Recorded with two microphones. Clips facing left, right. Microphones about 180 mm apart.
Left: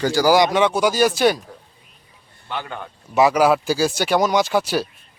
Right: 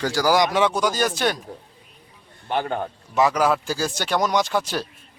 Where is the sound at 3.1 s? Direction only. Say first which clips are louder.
Left 4 dB; 10° left (ahead or behind).